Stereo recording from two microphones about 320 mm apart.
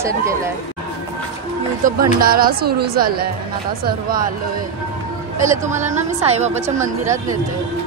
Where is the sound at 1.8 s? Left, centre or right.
Right.